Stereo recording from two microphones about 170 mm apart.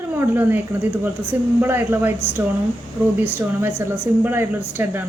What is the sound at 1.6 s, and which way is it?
Speech, 15° right (ahead or behind).